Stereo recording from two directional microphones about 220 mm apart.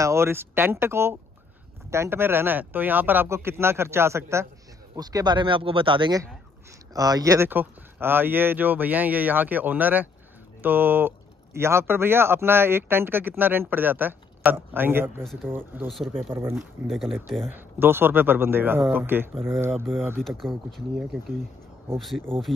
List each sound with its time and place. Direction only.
0.0 s speech: 10° right (ahead or behind)
20.2 s speech: centre (ahead or behind)